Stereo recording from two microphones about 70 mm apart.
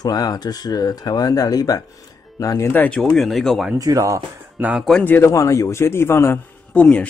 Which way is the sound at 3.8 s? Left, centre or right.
Right.